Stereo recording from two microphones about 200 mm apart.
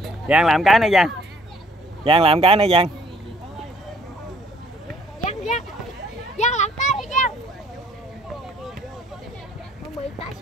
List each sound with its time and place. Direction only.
0.0 s speech: centre (ahead or behind)
2.0 s speech: 30° right (ahead or behind)
5.2 s a sound: 35° left (ahead or behind)
6.3 s children playing: 35° left (ahead or behind)